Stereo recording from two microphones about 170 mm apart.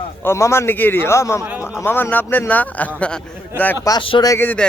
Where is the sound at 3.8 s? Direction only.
25° left (ahead or behind).